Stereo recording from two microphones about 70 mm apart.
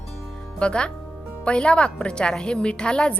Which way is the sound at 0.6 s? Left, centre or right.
Centre.